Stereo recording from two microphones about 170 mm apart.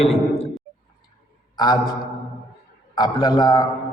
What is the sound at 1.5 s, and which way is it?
Speech, 25° left (ahead or behind).